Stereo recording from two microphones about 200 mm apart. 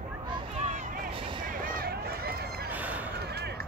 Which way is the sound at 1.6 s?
45° right (ahead or behind).